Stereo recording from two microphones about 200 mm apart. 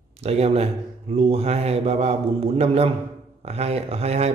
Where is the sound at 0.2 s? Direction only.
30° right (ahead or behind).